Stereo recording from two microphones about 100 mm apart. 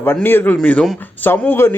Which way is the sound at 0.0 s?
20° left (ahead or behind).